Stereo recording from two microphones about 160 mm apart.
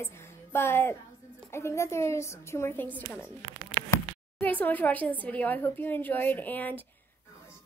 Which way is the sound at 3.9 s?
10° left (ahead or behind).